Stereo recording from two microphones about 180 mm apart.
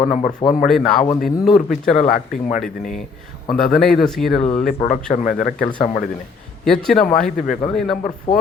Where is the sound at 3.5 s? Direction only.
Centre (ahead or behind).